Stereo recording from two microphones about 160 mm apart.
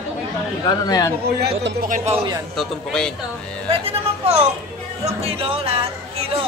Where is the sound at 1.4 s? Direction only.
90° right.